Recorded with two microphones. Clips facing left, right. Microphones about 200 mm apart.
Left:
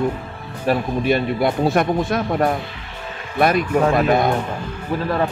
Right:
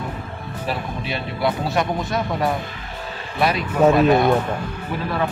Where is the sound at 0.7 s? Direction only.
50° left (ahead or behind).